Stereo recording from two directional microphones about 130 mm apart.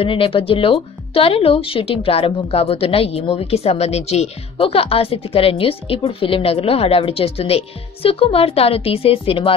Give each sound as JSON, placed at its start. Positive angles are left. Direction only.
{"t": 0.0, "sound": "speech", "side_deg": 45}